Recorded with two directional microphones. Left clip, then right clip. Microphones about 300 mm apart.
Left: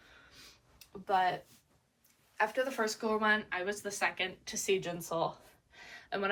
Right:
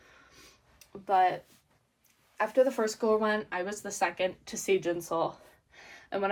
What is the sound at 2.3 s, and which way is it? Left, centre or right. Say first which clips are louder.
Speech: right 6 dB; right.